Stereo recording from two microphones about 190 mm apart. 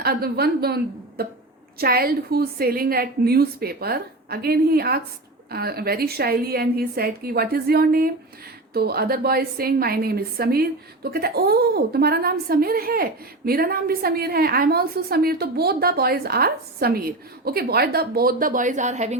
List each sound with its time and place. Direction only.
0.0 s a woman's voice: 55° right (ahead or behind); by 19.1 s 40° right (ahead or behind)